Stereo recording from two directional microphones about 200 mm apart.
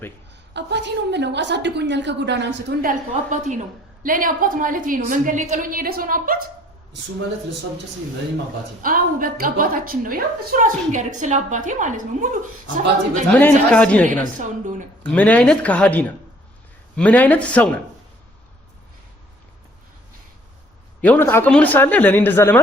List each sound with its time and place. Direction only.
0.5 s a woman's voice: 60° right (ahead or behind)
3.2 s a woman's voice: 35° right (ahead or behind)
8.8 s a woman's voice: 45° right (ahead or behind)
13.4 s speech: 5° left (ahead or behind)
21.0 s speech: 10° left (ahead or behind)